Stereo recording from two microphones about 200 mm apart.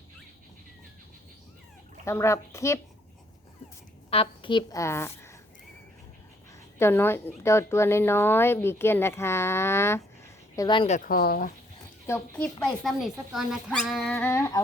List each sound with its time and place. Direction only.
2.0 s speech: 15° left (ahead or behind)
4.1 s speech: 25° left (ahead or behind)
6.7 s speech: 10° left (ahead or behind)
10.8 s speech: 40° left (ahead or behind)
12.0 s speech: 10° left (ahead or behind)
12.8 s speech: centre (ahead or behind)